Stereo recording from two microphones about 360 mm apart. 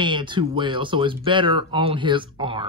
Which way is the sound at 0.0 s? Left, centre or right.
Centre.